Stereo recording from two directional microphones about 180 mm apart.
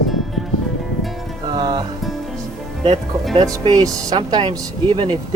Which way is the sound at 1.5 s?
25° right (ahead or behind).